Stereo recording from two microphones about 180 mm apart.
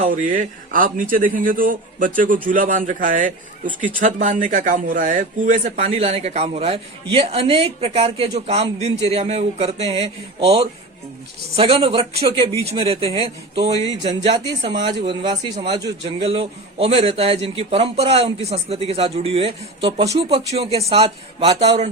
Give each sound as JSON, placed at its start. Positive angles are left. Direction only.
{"t": 0.0, "sound": "speech", "side_deg": -45}